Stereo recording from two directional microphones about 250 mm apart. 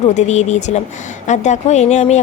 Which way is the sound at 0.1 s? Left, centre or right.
Left.